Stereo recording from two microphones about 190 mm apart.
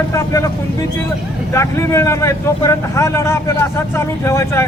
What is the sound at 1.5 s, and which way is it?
A man's voice, 15° left (ahead or behind).